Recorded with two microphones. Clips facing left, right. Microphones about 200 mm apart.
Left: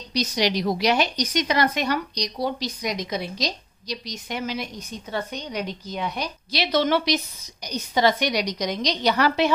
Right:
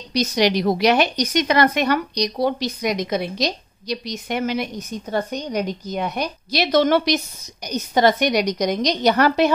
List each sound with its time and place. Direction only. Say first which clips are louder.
0.1 s a woman's voice: right 5 dB; 55° right (ahead or behind)